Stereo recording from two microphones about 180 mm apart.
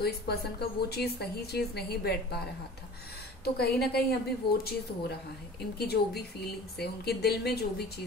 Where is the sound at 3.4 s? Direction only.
60° left (ahead or behind).